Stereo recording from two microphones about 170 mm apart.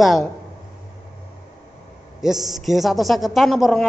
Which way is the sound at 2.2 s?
Centre (ahead or behind).